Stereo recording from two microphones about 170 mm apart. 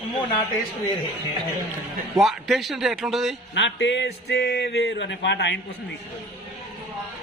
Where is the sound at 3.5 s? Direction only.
90° left.